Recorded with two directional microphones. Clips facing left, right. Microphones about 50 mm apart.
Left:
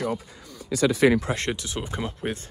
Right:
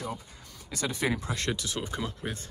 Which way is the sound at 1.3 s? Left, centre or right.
Left.